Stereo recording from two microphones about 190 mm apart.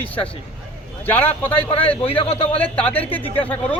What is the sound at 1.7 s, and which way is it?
Speech, 30° left (ahead or behind).